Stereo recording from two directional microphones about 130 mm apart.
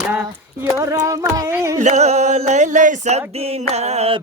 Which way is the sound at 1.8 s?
60° right (ahead or behind).